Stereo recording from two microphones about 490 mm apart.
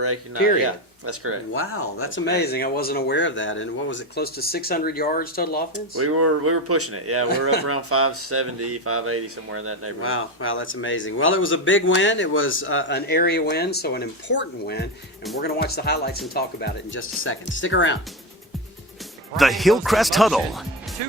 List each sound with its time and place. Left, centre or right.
0.6 s speech: right
1.5 s speech: left
6.0 s speech: right
10.0 s speech: left
19.4 s speech: centre